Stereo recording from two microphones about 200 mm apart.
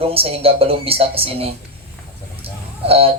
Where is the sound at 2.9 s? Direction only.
30° right (ahead or behind).